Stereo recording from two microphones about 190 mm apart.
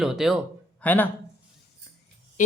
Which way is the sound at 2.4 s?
45° left (ahead or behind).